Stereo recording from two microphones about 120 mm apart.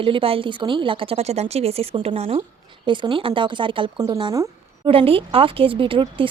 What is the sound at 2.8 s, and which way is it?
Speech, 40° right (ahead or behind).